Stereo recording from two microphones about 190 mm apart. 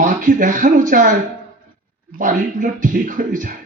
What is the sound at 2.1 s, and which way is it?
A man's voice, 45° right (ahead or behind).